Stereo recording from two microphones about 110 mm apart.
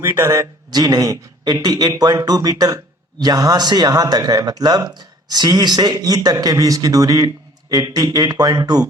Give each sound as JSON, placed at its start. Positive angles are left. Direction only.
{"t": 0.0, "sound": "speech", "side_deg": -25}